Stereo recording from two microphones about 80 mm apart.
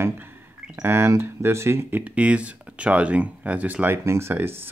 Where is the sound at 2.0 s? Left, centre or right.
Centre.